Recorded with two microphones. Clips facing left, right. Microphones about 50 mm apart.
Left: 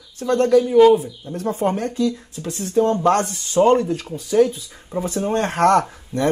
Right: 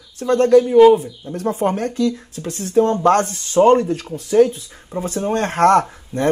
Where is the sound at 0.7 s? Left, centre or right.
Centre.